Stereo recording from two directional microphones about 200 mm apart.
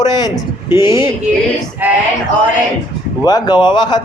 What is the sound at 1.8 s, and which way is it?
Speech, 10° right (ahead or behind).